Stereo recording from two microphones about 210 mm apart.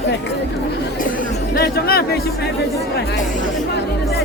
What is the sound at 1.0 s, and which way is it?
Speech, 40° left (ahead or behind).